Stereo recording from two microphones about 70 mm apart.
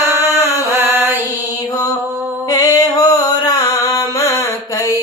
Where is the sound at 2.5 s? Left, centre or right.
Left.